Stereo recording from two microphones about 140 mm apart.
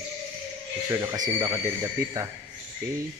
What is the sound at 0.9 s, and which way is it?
Speech, 25° right (ahead or behind).